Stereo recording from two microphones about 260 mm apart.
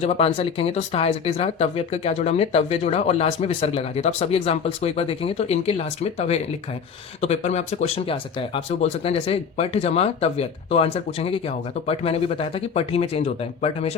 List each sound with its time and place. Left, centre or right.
0.0 s speech: left